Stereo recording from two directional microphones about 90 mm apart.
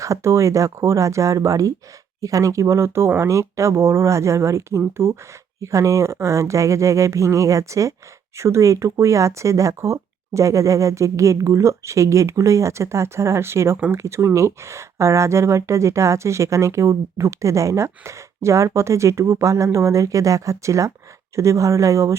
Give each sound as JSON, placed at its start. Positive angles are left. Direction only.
{"t": 0.0, "sound": "speech", "side_deg": -35}